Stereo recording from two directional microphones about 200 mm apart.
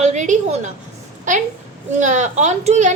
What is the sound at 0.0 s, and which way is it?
Speech, 35° right (ahead or behind).